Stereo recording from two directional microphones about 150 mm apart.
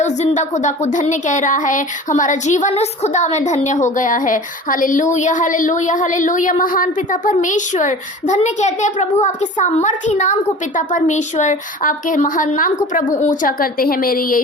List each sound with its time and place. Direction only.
0.0 s a child's voice: 50° left (ahead or behind); by 14.4 s 70° left (ahead or behind)